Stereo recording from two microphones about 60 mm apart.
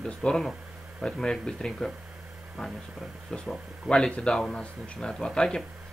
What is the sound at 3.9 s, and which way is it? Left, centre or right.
Speech, centre.